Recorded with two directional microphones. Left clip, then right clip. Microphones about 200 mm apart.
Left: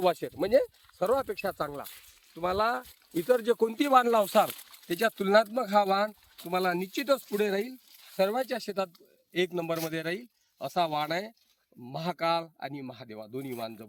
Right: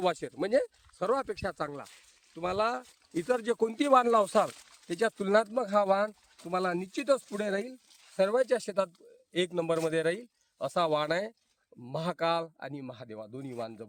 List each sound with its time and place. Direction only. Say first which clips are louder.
0.0 s a man's voice: left 3 dB; 10° left (ahead or behind); by 13.8 s 10° right (ahead or behind)